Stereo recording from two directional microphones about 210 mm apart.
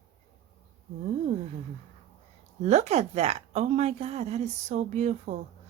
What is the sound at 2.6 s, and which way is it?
A woman's voice, 30° right (ahead or behind).